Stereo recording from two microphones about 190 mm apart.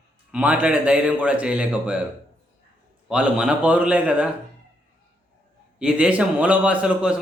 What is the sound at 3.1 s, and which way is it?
Speech, 5° right (ahead or behind).